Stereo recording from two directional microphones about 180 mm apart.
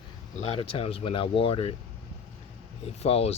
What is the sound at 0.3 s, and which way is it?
Speech, 35° left (ahead or behind).